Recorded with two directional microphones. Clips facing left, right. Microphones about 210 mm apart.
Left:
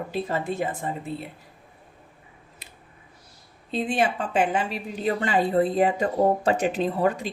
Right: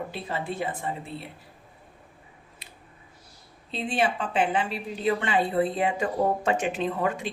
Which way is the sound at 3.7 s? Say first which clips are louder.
Left 2 dB; 45° left (ahead or behind).